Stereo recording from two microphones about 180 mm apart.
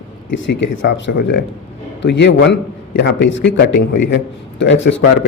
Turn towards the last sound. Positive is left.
turn(degrees=90)